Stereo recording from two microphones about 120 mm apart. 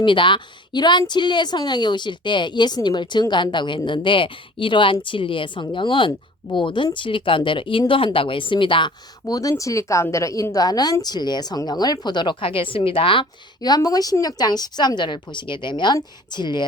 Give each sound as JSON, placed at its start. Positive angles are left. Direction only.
{"t": 0.0, "sound": "a woman's voice", "side_deg": 45}
{"t": 9.2, "sound": "a woman's voice", "side_deg": 30}
{"t": 13.6, "sound": "a woman's voice", "side_deg": 35}